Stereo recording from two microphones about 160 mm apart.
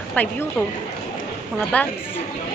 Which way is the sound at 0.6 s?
5° left (ahead or behind).